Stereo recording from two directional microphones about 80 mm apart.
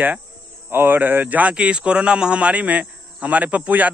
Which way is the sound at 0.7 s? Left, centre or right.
Right.